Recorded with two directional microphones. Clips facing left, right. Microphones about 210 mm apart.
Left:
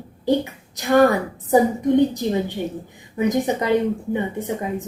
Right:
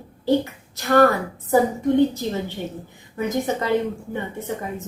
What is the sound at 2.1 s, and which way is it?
A woman's voice, 15° left (ahead or behind).